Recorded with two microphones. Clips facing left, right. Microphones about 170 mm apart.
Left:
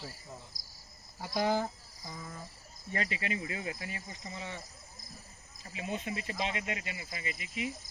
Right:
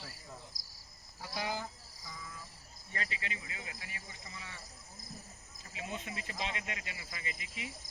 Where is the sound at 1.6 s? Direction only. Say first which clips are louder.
Left 8 dB; 45° left (ahead or behind).